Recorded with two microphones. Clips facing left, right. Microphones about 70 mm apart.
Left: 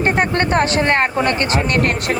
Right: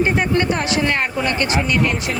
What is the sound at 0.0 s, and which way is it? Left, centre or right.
Speech, left.